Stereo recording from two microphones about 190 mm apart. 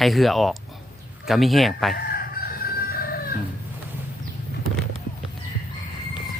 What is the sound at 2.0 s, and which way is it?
Chicken, 55° left (ahead or behind).